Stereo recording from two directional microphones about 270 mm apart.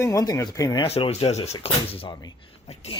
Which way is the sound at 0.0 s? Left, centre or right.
Centre.